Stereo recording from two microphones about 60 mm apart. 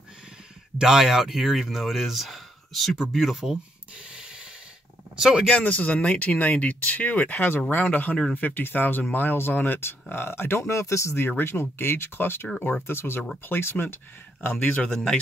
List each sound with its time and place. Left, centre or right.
0.7 s speech: centre
5.1 s speech: centre
5.5 s speech: left
10.6 s speech: left
11.1 s speech: left
14.4 s speech: left
14.9 s speech: centre